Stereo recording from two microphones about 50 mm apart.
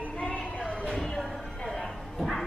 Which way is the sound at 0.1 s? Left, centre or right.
Left.